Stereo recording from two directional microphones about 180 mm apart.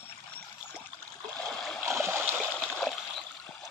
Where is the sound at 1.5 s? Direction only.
Centre (ahead or behind).